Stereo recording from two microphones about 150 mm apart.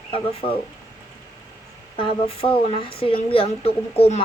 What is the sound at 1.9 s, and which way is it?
A woman's voice, 35° left (ahead or behind).